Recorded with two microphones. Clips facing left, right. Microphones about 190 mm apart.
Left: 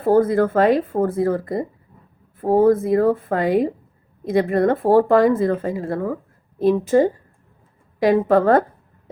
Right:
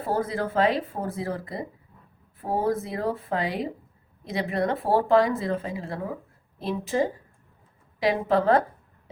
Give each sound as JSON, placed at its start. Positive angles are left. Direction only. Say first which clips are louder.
{"t": 0.0, "sound": "speech", "louder": "left 11 dB", "side_deg": 50}